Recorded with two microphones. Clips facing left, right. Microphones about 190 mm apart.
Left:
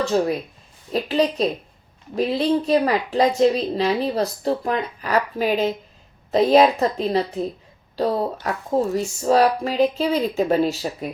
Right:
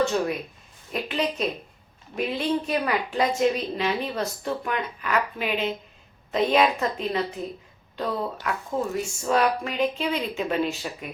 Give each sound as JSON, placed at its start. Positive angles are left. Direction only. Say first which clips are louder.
{"t": 0.0, "sound": "a woman's voice", "louder": "left 3 dB", "side_deg": 35}